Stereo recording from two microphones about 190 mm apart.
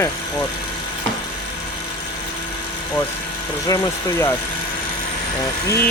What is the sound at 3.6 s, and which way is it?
Speech, 20° left (ahead or behind).